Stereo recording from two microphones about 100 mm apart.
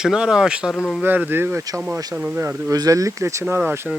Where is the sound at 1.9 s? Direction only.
35° right (ahead or behind).